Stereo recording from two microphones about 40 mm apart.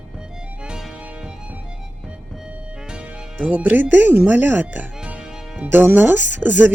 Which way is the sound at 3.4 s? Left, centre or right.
Right.